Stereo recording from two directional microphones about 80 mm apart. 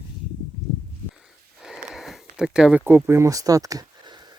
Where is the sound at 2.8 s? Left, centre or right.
Right.